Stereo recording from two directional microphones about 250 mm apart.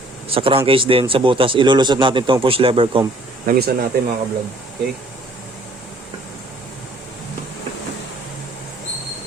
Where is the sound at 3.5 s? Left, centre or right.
Right.